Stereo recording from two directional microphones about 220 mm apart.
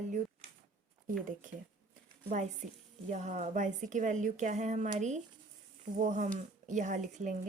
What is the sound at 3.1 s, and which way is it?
Speech, 30° right (ahead or behind).